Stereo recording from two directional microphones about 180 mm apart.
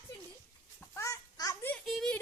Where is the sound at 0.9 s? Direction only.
15° left (ahead or behind).